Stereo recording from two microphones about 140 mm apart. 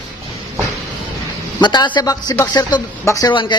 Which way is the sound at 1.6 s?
30° left (ahead or behind).